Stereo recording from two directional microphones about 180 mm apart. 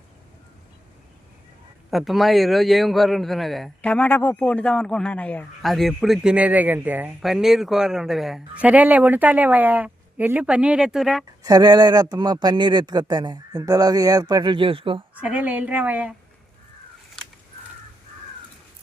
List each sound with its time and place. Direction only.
1.9 s a man's voice: centre (ahead or behind)
11.4 s speech: 20° right (ahead or behind)
15.1 s a woman's voice: 10° right (ahead or behind)
17.2 s a sound: 5° left (ahead or behind)